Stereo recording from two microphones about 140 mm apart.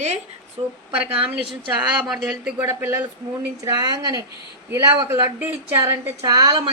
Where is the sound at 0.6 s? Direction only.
40° right (ahead or behind).